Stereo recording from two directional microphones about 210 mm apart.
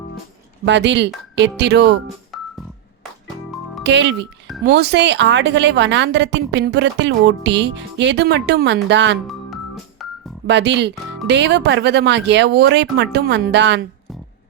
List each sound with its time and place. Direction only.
0.6 s a woman's voice: 55° right (ahead or behind)
2.3 s organ: centre (ahead or behind)
3.8 s a woman's voice: 55° right (ahead or behind)
10.0 s music: centre (ahead or behind)
10.4 s a woman's voice: 55° right (ahead or behind)